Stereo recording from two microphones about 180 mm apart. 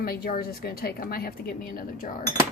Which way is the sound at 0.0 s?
55° left (ahead or behind).